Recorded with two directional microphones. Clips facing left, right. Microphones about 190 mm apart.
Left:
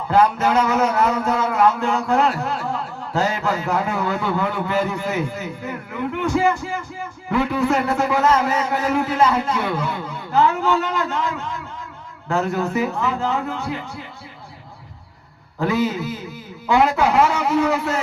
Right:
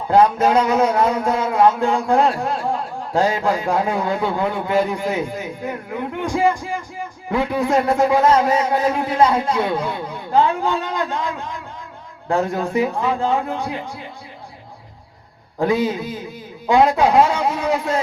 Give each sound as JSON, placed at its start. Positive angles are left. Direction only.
{"t": 0.2, "sound": "a man's voice", "side_deg": -25}
{"t": 15.6, "sound": "a man's voice", "side_deg": -20}